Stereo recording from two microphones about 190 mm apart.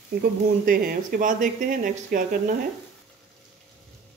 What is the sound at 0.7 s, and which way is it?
Speech, 50° right (ahead or behind).